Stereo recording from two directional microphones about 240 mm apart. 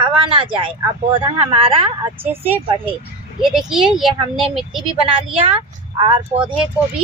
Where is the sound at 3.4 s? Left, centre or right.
Centre.